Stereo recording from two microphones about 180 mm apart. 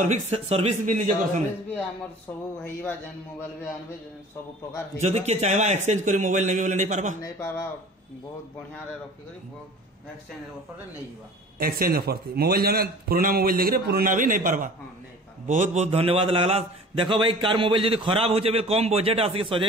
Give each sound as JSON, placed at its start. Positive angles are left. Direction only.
{"t": 0.1, "sound": "a man's voice", "side_deg": -35}
{"t": 2.6, "sound": "speech", "side_deg": 10}
{"t": 5.0, "sound": "a man's voice", "side_deg": -40}
{"t": 7.2, "sound": "speech", "side_deg": 15}
{"t": 11.5, "sound": "a man's voice", "side_deg": -55}